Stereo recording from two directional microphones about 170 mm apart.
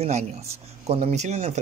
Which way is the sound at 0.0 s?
40° right (ahead or behind).